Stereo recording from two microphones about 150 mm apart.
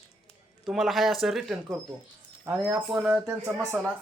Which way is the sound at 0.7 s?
Centre (ahead or behind).